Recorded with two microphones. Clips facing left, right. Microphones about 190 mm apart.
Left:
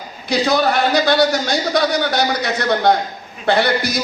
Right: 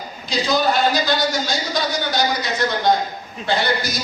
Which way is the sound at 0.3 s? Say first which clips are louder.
Left 3 dB; 60° left (ahead or behind).